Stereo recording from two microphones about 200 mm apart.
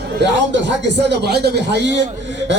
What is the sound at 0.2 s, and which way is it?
A man's voice, 60° right (ahead or behind).